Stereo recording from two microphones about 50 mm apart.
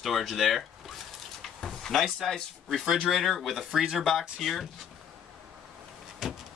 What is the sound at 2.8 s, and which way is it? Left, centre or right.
Speech, centre.